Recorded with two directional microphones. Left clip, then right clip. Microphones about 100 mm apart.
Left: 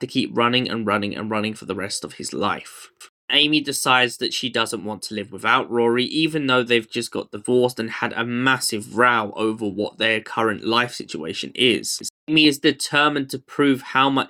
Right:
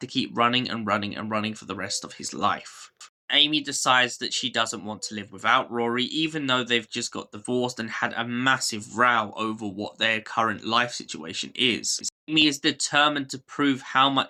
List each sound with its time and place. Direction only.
0.0 s speech: 30° left (ahead or behind)